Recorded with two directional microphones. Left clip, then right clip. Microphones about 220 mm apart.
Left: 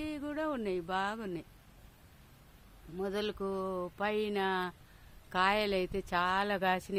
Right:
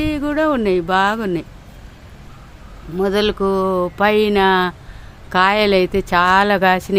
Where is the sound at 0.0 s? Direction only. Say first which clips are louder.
Right 19 dB; 5° left (ahead or behind).